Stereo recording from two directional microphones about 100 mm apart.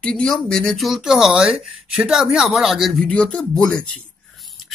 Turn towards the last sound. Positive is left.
turn(degrees=10)  # may be behind; listen again after turning